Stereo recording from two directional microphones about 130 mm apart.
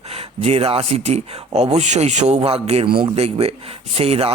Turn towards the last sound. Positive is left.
turn(degrees=-50)  # may be behind; listen again after turning